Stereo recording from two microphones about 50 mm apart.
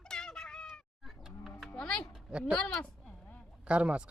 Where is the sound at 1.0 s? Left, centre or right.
Centre.